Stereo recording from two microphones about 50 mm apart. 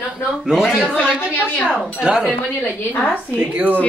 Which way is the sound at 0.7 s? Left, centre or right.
Centre.